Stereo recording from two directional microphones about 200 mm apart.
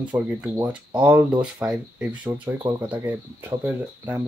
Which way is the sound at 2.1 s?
25° right (ahead or behind).